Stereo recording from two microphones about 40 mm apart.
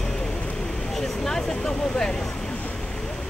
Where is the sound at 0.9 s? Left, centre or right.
Centre.